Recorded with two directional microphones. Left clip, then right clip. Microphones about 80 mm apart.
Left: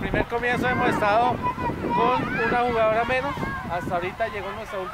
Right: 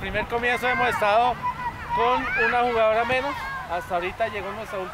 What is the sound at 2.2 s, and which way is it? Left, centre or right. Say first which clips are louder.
Speech: right 3 dB; right.